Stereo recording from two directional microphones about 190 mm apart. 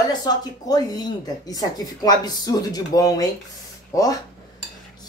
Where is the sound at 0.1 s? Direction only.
20° left (ahead or behind).